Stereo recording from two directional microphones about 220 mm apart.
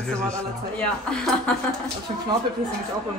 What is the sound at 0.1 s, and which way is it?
A man's voice, 5° left (ahead or behind).